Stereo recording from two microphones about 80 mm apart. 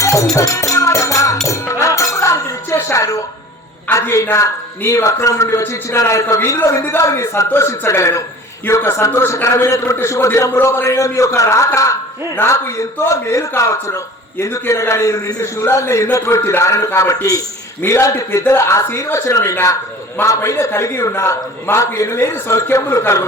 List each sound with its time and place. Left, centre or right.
0.0 s music: left
4.1 s a man's voice: left
17.7 s a man's voice: left